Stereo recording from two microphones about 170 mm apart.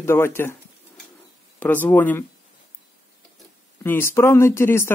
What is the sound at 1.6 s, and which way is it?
Speech, 10° left (ahead or behind).